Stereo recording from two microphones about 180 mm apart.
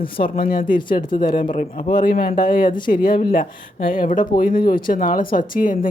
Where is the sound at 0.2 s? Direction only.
50° left (ahead or behind).